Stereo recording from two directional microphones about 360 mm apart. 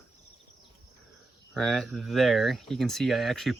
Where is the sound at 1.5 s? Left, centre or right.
Centre.